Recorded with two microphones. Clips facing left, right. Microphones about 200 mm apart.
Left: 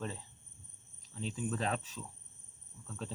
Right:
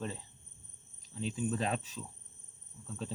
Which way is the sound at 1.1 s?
25° right (ahead or behind).